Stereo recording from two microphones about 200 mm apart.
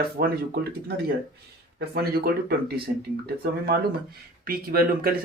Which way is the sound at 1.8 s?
50° right (ahead or behind).